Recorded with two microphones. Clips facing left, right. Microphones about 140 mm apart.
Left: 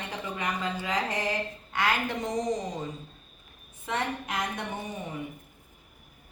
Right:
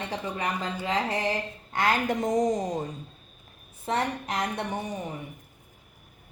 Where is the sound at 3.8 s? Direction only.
35° right (ahead or behind).